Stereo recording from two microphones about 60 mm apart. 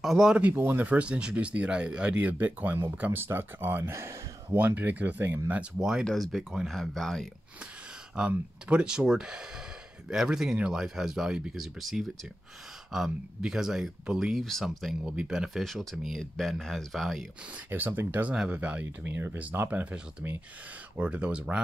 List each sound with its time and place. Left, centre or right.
0.0 s speech: centre
0.6 s speech: right
3.9 s speech: right
4.6 s speech: right
5.8 s speech: centre
6.0 s speech: centre
8.2 s speech: centre
15.0 s speech: centre
15.6 s speech: centre
17.6 s speech: right
19.8 s speech: right